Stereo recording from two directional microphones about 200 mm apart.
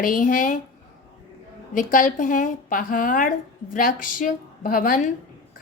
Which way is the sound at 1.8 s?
40° left (ahead or behind).